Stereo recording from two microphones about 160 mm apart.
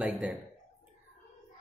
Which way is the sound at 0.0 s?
5° right (ahead or behind).